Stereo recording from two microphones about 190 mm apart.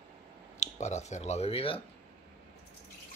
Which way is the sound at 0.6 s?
35° left (ahead or behind).